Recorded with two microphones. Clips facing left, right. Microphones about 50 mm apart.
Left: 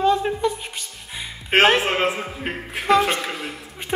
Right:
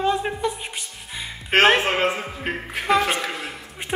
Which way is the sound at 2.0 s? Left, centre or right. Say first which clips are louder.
Even; centre.